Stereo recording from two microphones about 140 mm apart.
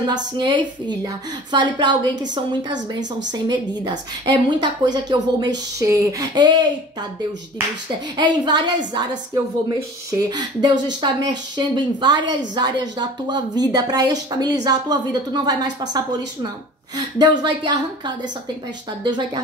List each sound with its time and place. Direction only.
0.0 s speech: 30° right (ahead or behind)
8.2 s speech: 30° right (ahead or behind)